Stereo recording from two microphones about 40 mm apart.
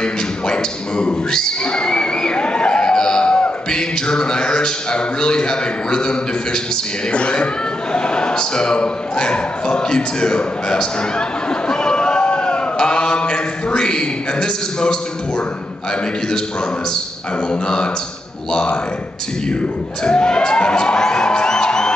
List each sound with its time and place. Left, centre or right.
0.0 s speech: left
7.9 s a sound: left
17.5 s speech: left
19.5 s speech: left